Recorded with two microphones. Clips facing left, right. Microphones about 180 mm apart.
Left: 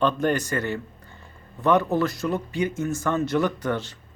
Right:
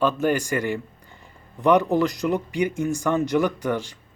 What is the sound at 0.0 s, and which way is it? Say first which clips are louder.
Speech: right 1 dB; 5° right (ahead or behind).